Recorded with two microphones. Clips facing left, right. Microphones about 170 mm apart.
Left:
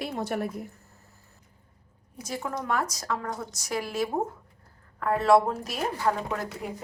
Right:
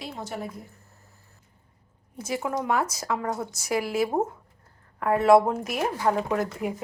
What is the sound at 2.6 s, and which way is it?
Speech, 20° right (ahead or behind).